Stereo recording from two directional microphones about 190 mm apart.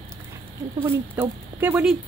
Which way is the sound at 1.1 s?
10° right (ahead or behind).